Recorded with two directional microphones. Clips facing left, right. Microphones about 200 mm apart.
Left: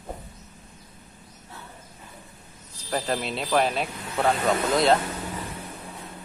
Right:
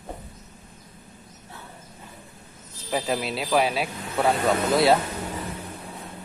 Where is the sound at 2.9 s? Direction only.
5° right (ahead or behind).